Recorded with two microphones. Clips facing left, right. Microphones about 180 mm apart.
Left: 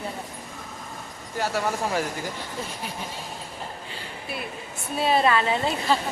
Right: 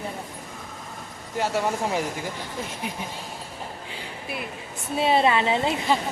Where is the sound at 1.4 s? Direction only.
20° right (ahead or behind).